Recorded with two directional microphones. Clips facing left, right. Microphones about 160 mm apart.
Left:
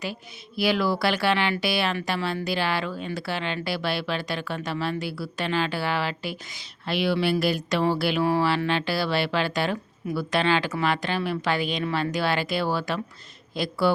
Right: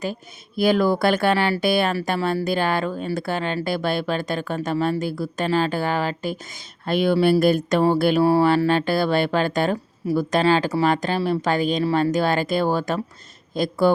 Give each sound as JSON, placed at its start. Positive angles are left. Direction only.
{"t": 0.0, "sound": "speech", "side_deg": -45}